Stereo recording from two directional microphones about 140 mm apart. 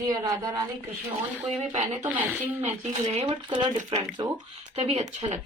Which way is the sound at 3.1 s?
45° right (ahead or behind).